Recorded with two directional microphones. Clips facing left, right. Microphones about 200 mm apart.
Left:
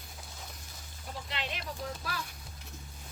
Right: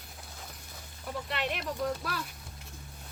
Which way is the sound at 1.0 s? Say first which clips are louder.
Right 6 dB; 60° right (ahead or behind).